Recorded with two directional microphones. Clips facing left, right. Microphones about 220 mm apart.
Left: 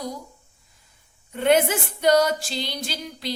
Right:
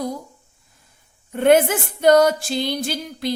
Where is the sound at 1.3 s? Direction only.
50° right (ahead or behind).